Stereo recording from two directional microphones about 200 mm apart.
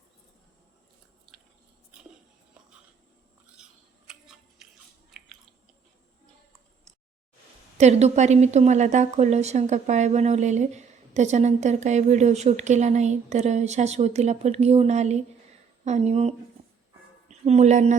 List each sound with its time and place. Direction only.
3.6 s toothbrush: centre (ahead or behind)
7.8 s a woman's voice: 35° right (ahead or behind)